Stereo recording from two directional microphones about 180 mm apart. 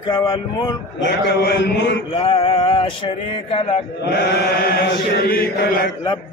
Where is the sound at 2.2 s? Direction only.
30° left (ahead or behind).